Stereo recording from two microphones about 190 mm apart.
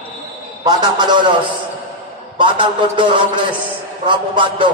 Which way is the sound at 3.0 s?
25° right (ahead or behind).